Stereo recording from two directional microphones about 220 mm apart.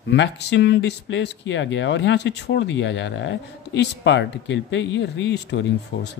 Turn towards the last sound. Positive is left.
turn(degrees=55)  # may be behind; listen again after turning